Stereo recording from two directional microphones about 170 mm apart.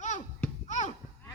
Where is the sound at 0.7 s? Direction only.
45° left (ahead or behind).